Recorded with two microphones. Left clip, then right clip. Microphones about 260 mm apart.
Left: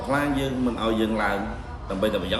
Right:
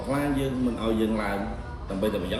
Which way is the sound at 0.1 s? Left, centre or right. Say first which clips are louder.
Left 3 dB; centre.